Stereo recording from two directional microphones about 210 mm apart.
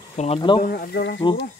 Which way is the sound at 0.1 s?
30° left (ahead or behind).